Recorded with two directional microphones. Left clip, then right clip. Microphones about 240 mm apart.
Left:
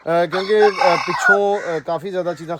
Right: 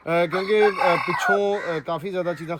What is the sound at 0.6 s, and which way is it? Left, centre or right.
Chicken, left.